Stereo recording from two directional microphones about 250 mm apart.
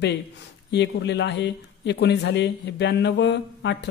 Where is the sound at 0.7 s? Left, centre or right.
Left.